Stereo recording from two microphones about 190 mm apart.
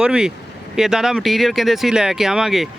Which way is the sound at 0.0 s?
5° right (ahead or behind).